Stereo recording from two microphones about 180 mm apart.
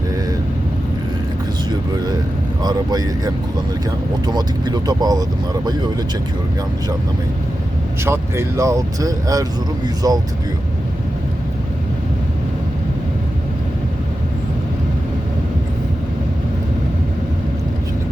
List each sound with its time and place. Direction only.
2.6 s speech: 20° right (ahead or behind)
8.0 s speech: 15° right (ahead or behind)